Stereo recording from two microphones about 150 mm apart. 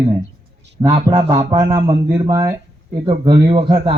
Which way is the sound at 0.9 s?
25° right (ahead or behind).